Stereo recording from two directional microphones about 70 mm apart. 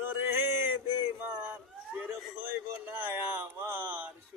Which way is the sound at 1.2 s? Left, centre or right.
Right.